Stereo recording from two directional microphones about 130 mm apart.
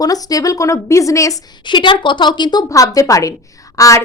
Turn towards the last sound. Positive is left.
turn(degrees=25)  # may be behind; listen again after turning